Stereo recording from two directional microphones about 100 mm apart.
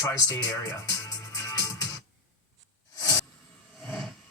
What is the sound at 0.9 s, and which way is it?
Music, 40° left (ahead or behind).